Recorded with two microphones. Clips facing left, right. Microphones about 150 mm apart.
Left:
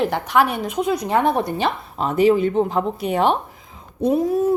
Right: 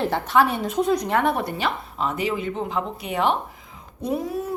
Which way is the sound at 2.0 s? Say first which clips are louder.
Left 11 dB; 35° left (ahead or behind).